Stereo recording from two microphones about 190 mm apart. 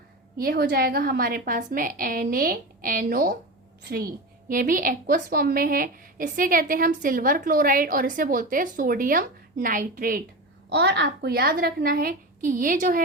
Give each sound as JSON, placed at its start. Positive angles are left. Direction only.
{"t": 0.3, "sound": "a woman's voice", "side_deg": -55}
{"t": 4.4, "sound": "a woman's voice", "side_deg": -45}
{"t": 10.7, "sound": "a woman's voice", "side_deg": -65}